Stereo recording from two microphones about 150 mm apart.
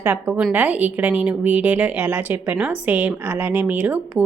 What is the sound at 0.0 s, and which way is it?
A woman's voice, 15° right (ahead or behind).